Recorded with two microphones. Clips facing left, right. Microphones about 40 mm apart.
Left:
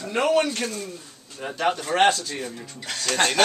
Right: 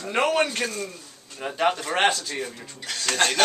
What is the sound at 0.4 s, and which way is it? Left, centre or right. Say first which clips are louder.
Speech: even; right.